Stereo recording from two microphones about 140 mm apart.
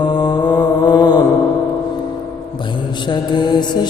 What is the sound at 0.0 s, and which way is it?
Mantra, 30° left (ahead or behind).